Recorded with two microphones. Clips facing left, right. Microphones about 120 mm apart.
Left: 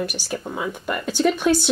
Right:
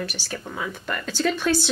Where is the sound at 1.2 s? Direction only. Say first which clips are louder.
Left 4 dB; 15° left (ahead or behind).